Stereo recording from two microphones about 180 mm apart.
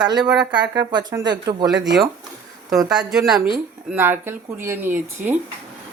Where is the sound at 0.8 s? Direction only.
25° right (ahead or behind).